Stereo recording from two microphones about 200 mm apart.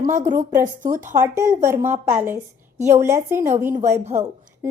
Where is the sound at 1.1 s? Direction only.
15° right (ahead or behind).